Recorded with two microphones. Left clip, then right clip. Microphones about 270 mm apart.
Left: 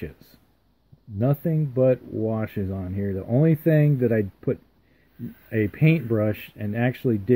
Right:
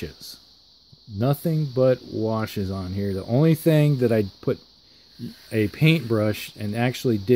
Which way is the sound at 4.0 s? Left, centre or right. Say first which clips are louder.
Right 2 dB; right.